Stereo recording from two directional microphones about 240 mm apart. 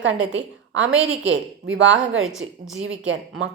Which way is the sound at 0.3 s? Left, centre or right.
Right.